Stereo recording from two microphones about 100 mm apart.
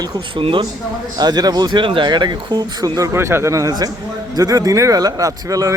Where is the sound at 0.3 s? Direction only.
60° right (ahead or behind).